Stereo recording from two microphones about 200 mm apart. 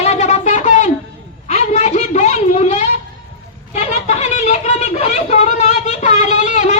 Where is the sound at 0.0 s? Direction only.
35° left (ahead or behind).